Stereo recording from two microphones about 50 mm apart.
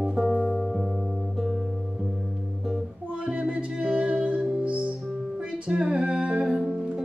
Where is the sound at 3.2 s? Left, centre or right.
Right.